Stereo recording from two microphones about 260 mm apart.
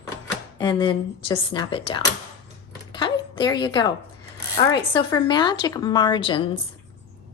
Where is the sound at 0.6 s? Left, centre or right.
Centre.